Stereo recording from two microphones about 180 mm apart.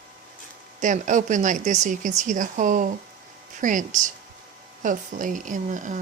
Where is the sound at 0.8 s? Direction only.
45° right (ahead or behind).